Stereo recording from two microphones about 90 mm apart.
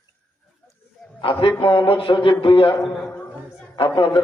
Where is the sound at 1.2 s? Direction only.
75° left (ahead or behind).